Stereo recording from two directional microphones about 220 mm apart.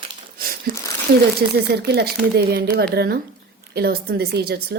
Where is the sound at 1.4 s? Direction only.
45° right (ahead or behind).